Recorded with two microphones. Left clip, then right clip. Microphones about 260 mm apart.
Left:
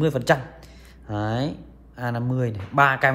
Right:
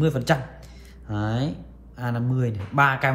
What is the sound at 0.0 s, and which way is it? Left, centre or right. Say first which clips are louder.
Speech: left 2 dB; left.